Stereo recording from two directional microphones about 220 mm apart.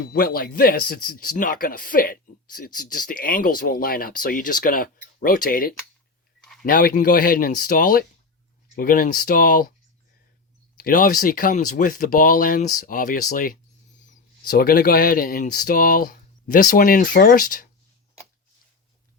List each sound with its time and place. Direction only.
0.1 s a man's voice: 40° left (ahead or behind)
6.4 s a sound: centre (ahead or behind)
6.7 s a man's voice: 40° left (ahead or behind)
10.8 s a man's voice: 40° left (ahead or behind)